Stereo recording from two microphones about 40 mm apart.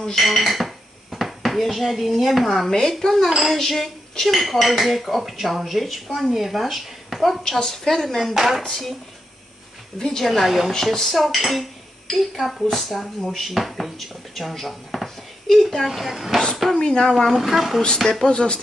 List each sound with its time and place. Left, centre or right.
0.1 s speech: centre
2.7 s a woman's voice: centre
3.3 s dishes: centre
8.4 s speech: centre
8.6 s a woman's voice: centre
9.9 s dishes: centre
16.7 s speech: centre
17.4 s dishes: centre
17.8 s speech: centre